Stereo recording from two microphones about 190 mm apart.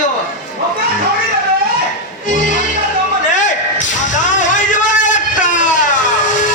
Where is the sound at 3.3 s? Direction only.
40° left (ahead or behind).